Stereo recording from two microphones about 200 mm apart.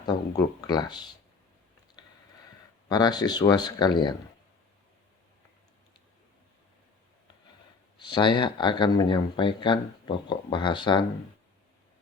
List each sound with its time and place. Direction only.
0.1 s speech: 20° left (ahead or behind)
2.9 s speech: 20° left (ahead or behind)
7.9 s speech: 20° left (ahead or behind)